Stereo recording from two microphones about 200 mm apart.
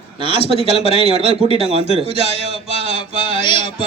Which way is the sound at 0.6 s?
30° left (ahead or behind).